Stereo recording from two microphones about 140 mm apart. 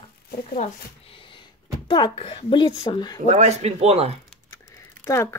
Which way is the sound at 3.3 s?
50° right (ahead or behind).